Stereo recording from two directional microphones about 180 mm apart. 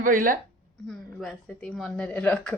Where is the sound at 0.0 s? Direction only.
50° right (ahead or behind).